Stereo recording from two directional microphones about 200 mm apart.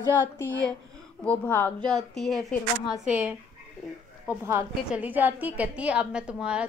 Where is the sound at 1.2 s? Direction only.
5° left (ahead or behind).